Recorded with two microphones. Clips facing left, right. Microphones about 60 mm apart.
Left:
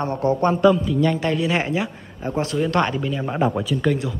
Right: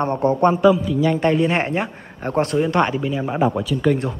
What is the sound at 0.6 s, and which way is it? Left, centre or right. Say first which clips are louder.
Speech: right 1 dB; centre.